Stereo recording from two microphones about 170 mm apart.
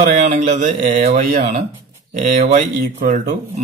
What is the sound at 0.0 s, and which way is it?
Speech, 45° right (ahead or behind).